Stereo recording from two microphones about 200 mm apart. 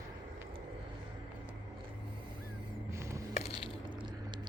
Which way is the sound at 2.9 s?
15° right (ahead or behind).